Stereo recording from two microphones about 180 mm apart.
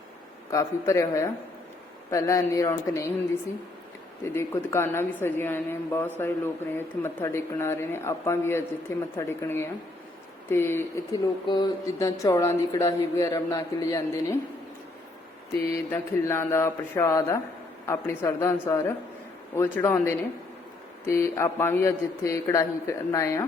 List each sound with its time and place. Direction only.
0.5 s speech: 15° left (ahead or behind)
4.4 s speech: 15° left (ahead or behind)
15.5 s speech: 15° left (ahead or behind)